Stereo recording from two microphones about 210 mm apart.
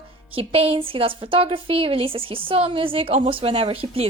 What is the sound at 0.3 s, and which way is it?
A woman's voice, 25° right (ahead or behind).